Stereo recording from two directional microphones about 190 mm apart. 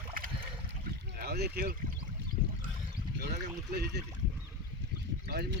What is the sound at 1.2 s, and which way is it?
Speech, 55° right (ahead or behind).